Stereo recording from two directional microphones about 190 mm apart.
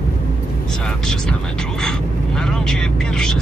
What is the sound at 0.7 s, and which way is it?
Speech, 5° left (ahead or behind).